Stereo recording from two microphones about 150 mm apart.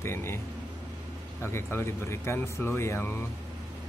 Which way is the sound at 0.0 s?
15° left (ahead or behind).